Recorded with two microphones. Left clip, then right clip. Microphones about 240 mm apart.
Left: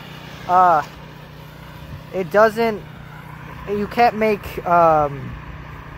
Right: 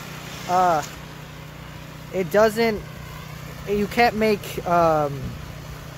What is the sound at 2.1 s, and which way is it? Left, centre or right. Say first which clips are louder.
Speech: left 3 dB; centre.